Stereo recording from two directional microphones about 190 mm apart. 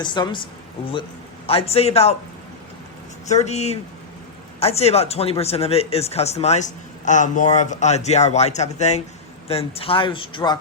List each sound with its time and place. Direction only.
0.0 s speech: 25° left (ahead or behind)
1.5 s speech: 30° left (ahead or behind)
3.2 s speech: 35° left (ahead or behind)